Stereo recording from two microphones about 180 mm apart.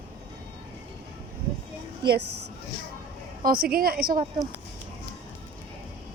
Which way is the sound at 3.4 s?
55° right (ahead or behind).